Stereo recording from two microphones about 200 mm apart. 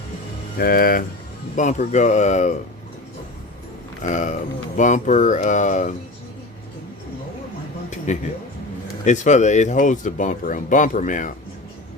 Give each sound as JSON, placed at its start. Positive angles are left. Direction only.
{"t": 0.6, "sound": "speech", "side_deg": 45}
{"t": 4.0, "sound": "speech", "side_deg": 40}
{"t": 7.9, "sound": "a sound", "side_deg": 35}
{"t": 9.0, "sound": "speech", "side_deg": 35}